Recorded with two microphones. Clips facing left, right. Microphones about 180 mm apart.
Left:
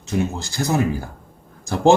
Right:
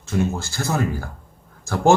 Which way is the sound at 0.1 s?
15° left (ahead or behind).